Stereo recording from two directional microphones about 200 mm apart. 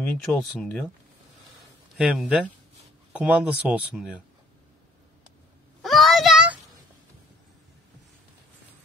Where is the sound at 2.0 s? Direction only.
5° right (ahead or behind).